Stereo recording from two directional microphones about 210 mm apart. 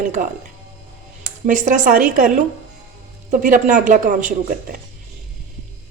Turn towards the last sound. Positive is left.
turn(degrees=-40)  # may be behind; listen again after turning